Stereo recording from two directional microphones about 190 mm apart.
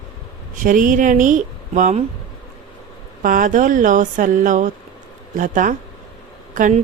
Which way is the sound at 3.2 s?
45° right (ahead or behind).